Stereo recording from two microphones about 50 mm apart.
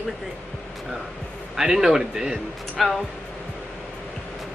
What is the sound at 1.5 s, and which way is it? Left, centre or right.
Speech, centre.